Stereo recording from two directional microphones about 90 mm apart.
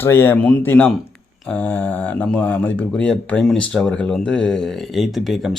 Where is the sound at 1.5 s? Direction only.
20° left (ahead or behind).